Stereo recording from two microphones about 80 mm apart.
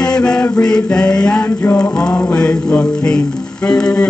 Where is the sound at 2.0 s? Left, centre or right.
Centre.